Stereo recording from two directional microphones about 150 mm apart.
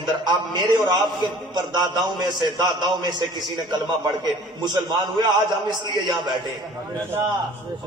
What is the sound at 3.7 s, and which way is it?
A man's voice, 30° right (ahead or behind).